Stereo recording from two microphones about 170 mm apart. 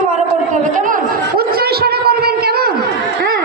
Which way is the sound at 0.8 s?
50° right (ahead or behind).